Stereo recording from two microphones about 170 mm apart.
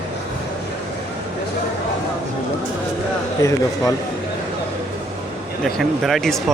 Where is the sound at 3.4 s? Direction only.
20° left (ahead or behind).